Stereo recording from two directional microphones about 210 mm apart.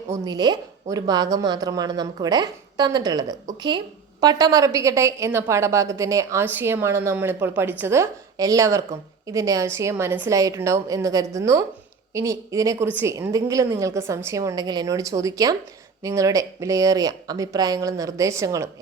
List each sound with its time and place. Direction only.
0.3 s a woman's voice: 20° right (ahead or behind)